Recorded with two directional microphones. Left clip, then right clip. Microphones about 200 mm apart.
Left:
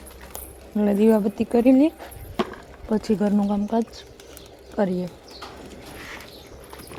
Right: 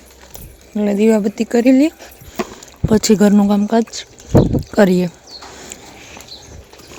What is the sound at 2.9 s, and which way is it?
Speech, 25° right (ahead or behind).